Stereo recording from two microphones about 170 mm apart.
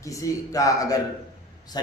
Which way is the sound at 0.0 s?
20° left (ahead or behind).